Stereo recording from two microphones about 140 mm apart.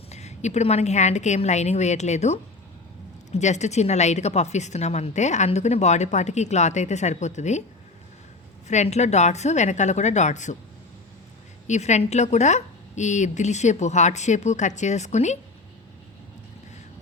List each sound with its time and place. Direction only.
0.1 s a woman's voice: 50° left (ahead or behind)
8.6 s a woman's voice: 55° left (ahead or behind)
11.7 s a woman's voice: 55° left (ahead or behind)